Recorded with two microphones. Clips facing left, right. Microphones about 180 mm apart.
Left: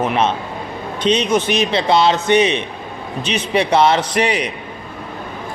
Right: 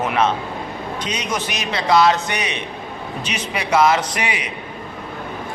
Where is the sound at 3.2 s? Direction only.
30° left (ahead or behind).